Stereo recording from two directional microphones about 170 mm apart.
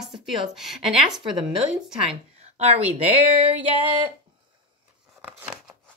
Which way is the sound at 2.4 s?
40° right (ahead or behind).